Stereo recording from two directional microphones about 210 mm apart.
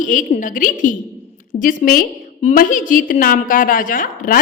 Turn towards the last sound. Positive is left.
turn(degrees=40)  # may be behind; listen again after turning